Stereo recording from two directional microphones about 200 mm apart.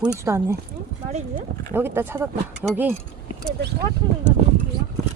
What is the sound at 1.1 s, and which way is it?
Speech, 35° right (ahead or behind).